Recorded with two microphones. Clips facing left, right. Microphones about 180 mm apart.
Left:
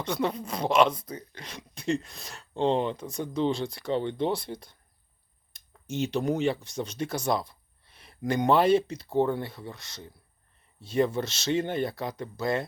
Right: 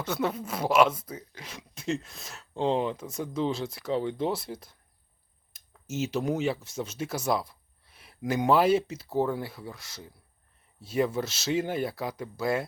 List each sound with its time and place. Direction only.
0.0 s speech: 5° right (ahead or behind)